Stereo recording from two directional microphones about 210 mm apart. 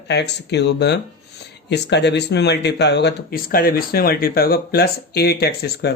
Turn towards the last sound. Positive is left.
turn(degrees=50)  # may be behind; listen again after turning